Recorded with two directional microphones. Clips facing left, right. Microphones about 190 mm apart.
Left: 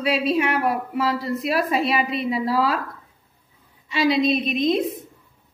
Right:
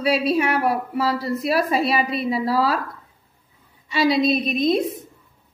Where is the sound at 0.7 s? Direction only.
35° right (ahead or behind).